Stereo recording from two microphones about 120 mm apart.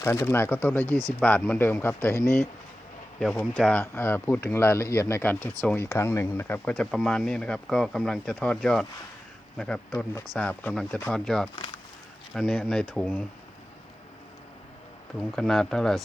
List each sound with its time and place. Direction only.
0.0 s speech: 25° left (ahead or behind)
3.2 s speech: 5° left (ahead or behind)
6.7 s speech: 5° left (ahead or behind)
15.4 s speech: 5° left (ahead or behind)